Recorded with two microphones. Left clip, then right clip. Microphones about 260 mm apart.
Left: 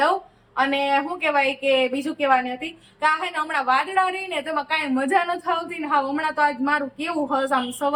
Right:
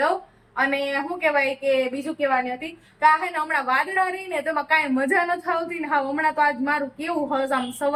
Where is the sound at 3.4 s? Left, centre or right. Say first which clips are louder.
Left 1 dB; centre.